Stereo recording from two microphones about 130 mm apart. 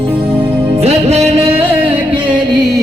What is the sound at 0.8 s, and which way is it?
Music, 55° right (ahead or behind).